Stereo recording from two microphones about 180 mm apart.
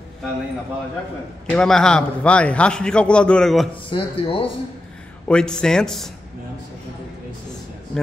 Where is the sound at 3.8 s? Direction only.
30° left (ahead or behind).